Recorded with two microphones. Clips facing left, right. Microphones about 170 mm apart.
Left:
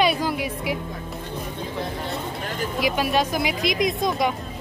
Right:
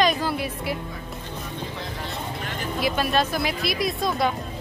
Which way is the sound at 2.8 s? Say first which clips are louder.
Left 1 dB; 10° left (ahead or behind).